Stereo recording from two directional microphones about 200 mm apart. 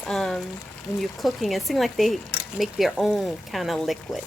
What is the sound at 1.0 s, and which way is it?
Speech, centre (ahead or behind).